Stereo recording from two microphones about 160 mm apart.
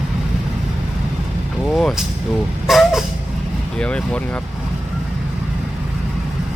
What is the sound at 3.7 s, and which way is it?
Speech, 5° left (ahead or behind).